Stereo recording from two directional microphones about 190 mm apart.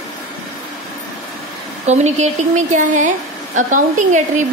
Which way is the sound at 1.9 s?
35° right (ahead or behind).